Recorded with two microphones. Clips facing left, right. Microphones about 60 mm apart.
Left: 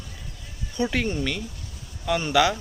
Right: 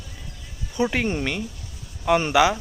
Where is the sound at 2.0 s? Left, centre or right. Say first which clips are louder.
Right 5 dB; right.